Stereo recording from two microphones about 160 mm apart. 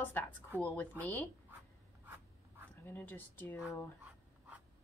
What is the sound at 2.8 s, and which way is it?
Speech, 10° left (ahead or behind).